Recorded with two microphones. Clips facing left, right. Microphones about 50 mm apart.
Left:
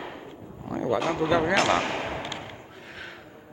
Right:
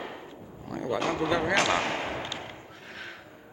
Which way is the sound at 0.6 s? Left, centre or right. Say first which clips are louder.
Left 5 dB; left.